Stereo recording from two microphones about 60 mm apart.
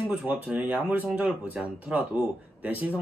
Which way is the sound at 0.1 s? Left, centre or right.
Right.